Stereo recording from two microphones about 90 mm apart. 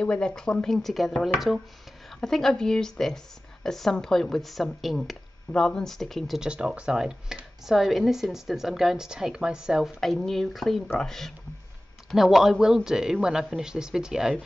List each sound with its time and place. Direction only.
0.0 s speech: 10° left (ahead or behind); by 14.3 s 5° right (ahead or behind)